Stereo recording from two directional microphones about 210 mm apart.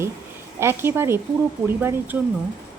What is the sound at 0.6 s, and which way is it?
A woman's voice, 10° right (ahead or behind).